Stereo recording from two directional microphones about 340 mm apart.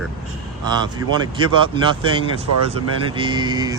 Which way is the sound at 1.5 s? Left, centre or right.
Centre.